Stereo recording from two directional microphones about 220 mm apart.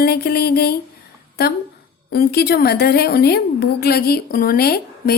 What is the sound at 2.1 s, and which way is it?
A woman's voice, 45° left (ahead or behind).